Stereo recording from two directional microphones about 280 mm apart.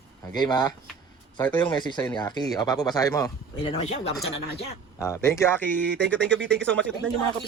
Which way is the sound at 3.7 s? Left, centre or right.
Left.